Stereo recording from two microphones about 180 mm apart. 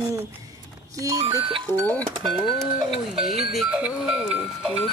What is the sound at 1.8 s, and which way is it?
Speech, 5° left (ahead or behind).